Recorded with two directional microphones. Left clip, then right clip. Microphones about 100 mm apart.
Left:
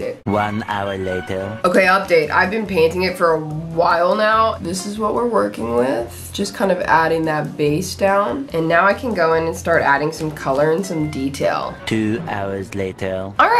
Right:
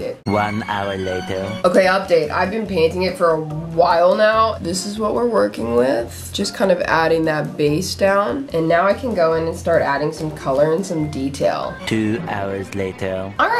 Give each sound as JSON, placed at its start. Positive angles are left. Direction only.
{"t": 0.3, "sound": "speech", "side_deg": 0}
{"t": 8.6, "sound": "speech", "side_deg": -5}